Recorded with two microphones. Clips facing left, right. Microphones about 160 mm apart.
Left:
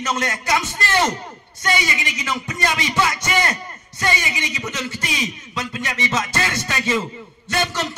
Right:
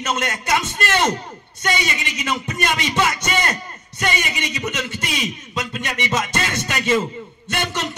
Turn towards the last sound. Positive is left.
turn(degrees=-20)  # may be behind; listen again after turning